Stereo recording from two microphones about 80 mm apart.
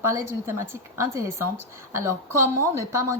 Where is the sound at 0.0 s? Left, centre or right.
Right.